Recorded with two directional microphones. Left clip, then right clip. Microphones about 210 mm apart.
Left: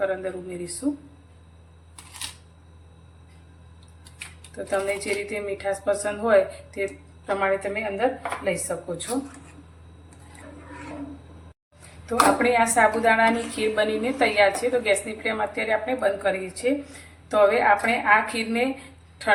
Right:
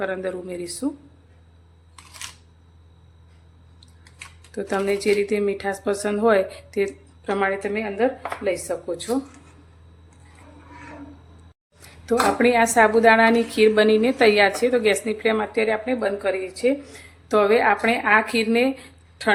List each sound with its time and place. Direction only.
0.0 s speech: 55° right (ahead or behind)
4.5 s speech: 55° right (ahead or behind)
12.0 s speech: 50° right (ahead or behind)